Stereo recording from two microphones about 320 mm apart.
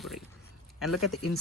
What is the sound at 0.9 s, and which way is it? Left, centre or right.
Speech, left.